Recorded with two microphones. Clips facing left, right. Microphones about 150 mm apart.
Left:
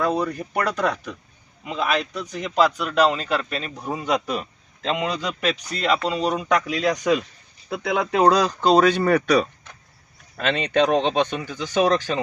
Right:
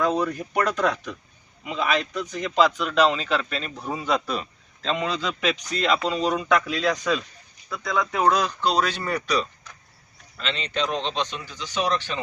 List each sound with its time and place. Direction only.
0.0 s a man's voice: 10° left (ahead or behind)
6.7 s speech: 45° left (ahead or behind)
7.7 s speech: 65° left (ahead or behind)
8.3 s speech: 35° left (ahead or behind)